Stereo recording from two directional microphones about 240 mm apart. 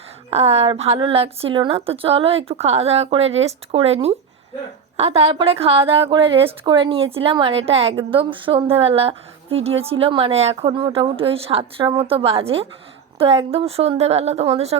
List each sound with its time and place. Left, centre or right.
0.3 s a woman's voice: right